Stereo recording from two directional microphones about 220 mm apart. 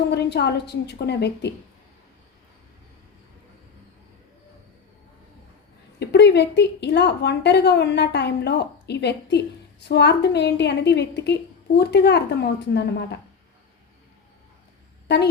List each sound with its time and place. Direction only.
0.1 s a woman's voice: 50° left (ahead or behind)
6.0 s a woman's voice: 50° left (ahead or behind)
15.0 s speech: 50° left (ahead or behind)